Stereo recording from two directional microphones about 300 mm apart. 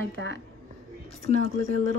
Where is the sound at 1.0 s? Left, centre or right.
Left.